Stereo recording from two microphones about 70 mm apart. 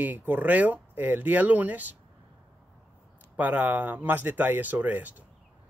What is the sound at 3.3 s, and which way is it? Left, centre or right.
Speech, right.